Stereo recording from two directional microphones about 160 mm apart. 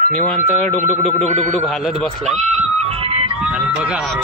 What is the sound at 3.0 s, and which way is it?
Music, 40° right (ahead or behind).